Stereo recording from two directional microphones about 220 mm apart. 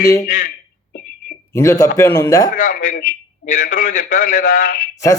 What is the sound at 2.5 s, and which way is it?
A man's voice, 35° left (ahead or behind).